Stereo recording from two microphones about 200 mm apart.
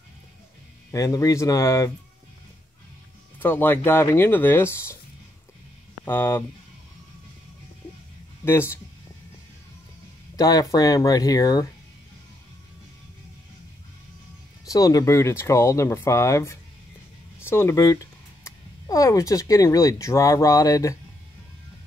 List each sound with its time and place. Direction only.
0.9 s speech: 15° left (ahead or behind)
3.3 s speech: 10° left (ahead or behind)
6.0 s speech: 10° left (ahead or behind)
8.5 s speech: 10° left (ahead or behind)
10.3 s speech: 15° left (ahead or behind)
14.7 s speech: 20° left (ahead or behind)